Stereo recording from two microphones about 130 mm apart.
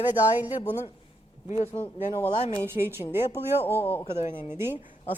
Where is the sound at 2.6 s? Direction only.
20° right (ahead or behind).